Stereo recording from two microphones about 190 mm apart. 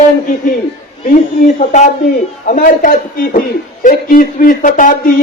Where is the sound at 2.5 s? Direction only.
50° left (ahead or behind).